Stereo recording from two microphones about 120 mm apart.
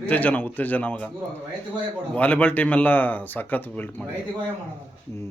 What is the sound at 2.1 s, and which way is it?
Speech, 10° left (ahead or behind).